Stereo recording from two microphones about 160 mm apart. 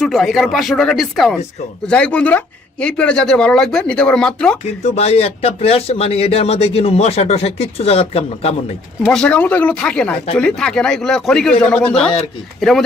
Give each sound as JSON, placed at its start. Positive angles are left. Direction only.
{"t": 0.0, "sound": "speech", "side_deg": 0}
{"t": 4.8, "sound": "speech", "side_deg": 40}
{"t": 9.0, "sound": "speech", "side_deg": 5}